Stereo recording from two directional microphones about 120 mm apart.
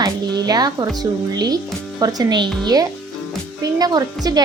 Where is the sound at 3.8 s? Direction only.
35° right (ahead or behind).